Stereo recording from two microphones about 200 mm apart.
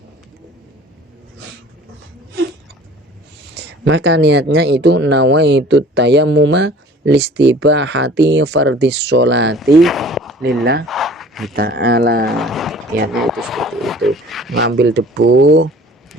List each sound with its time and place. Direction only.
3.5 s speech: 60° right (ahead or behind)
9.6 s speech: centre (ahead or behind)
10.4 s speech: 50° right (ahead or behind)
10.8 s a sound: centre (ahead or behind)
11.5 s speech: 55° right (ahead or behind)
12.3 s speech: centre (ahead or behind)
13.1 s a sound: centre (ahead or behind)
14.5 s speech: 60° right (ahead or behind)